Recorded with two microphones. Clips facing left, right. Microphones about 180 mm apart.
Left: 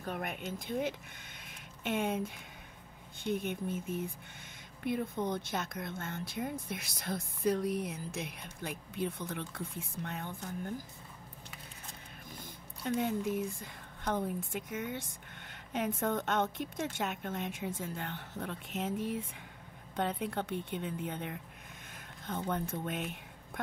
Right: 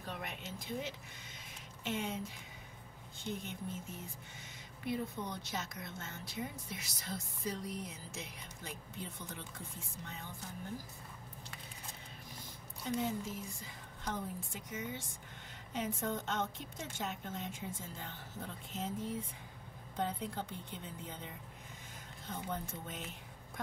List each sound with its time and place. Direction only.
0.0 s speech: 55° left (ahead or behind)
1.4 s a sound: 60° left (ahead or behind)
3.3 s speech: 60° left (ahead or behind)
12.8 s a woman's voice: 60° left (ahead or behind)